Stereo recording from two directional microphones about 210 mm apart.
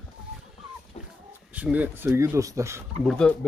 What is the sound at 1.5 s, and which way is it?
Speech, 5° right (ahead or behind).